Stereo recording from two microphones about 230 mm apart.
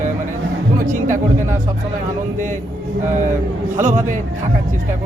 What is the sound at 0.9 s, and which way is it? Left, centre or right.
Speech, right.